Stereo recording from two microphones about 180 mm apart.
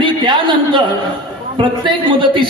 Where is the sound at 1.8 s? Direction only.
25° right (ahead or behind).